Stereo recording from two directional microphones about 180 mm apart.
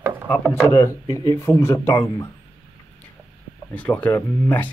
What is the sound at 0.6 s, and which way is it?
Speech, 20° left (ahead or behind).